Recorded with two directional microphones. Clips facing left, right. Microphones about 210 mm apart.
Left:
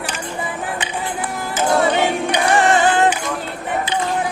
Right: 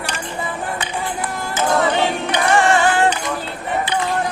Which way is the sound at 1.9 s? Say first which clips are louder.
Left 1 dB; 15° left (ahead or behind).